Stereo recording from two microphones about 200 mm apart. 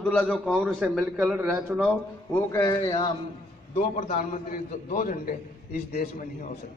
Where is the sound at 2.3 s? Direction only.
15° left (ahead or behind).